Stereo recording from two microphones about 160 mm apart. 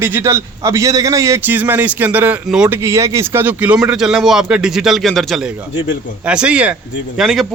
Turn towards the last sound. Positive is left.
turn(degrees=0)  # may be behind; listen again after turning